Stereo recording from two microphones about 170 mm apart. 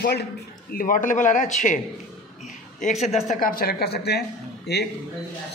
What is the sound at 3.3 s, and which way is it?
A man's voice, 55° left (ahead or behind).